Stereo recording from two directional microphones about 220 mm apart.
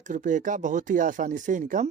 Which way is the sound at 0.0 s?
35° right (ahead or behind).